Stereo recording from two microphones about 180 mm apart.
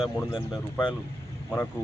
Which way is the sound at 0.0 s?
5° right (ahead or behind).